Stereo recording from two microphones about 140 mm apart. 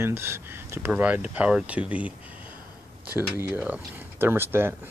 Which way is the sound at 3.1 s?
15° right (ahead or behind).